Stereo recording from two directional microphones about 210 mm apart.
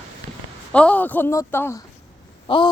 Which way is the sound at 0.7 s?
5° left (ahead or behind).